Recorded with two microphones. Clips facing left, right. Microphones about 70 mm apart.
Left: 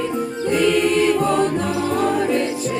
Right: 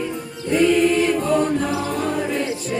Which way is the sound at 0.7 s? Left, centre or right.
Centre.